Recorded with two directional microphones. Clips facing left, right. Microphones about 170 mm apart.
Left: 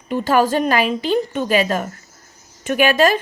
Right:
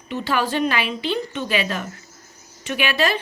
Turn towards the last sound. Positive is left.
turn(degrees=45)  # may be behind; listen again after turning